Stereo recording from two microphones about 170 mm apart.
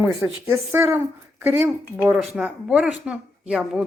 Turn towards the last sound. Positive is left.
turn(degrees=0)  # may be behind; listen again after turning